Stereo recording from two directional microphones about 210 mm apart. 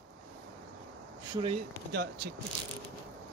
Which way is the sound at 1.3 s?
25° right (ahead or behind).